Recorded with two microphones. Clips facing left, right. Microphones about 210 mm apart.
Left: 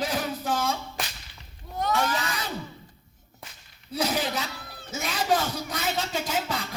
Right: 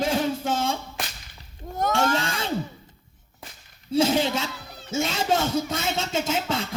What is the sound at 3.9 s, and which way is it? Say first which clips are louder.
Speech: right 6 dB; 25° right (ahead or behind).